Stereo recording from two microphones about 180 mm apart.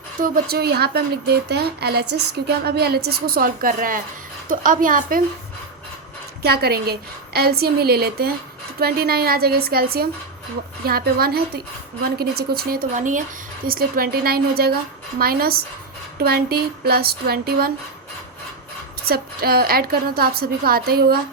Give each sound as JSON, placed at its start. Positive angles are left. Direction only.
{"t": 0.2, "sound": "a woman's voice", "side_deg": -60}
{"t": 6.4, "sound": "a woman's voice", "side_deg": -60}
{"t": 19.0, "sound": "a woman's voice", "side_deg": -55}